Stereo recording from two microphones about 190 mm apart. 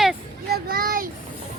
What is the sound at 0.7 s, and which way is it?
Speech, 50° right (ahead or behind).